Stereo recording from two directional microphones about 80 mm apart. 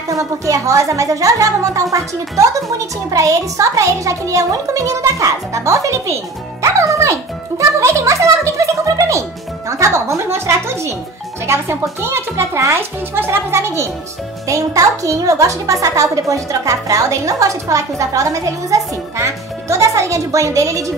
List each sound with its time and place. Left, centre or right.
0.1 s a child's voice: right
14.5 s a child's voice: right